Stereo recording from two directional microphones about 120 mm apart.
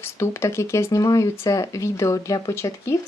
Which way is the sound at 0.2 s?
20° left (ahead or behind).